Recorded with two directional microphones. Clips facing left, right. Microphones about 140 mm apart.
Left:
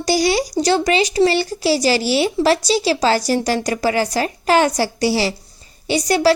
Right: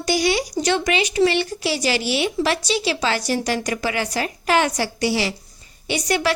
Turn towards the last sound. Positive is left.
turn(degrees=35)  # may be behind; listen again after turning